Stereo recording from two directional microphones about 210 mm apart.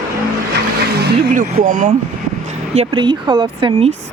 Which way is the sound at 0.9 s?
45° right (ahead or behind).